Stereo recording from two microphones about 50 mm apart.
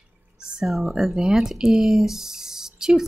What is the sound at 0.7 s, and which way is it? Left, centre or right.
Speech, centre.